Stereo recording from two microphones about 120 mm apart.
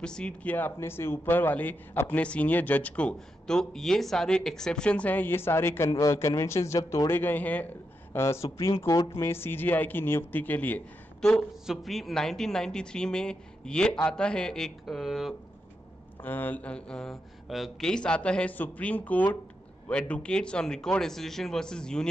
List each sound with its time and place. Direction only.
0.0 s a woman's voice: 10° left (ahead or behind)
16.3 s speech: 15° left (ahead or behind)